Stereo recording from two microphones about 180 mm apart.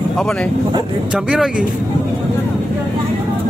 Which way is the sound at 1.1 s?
5° right (ahead or behind).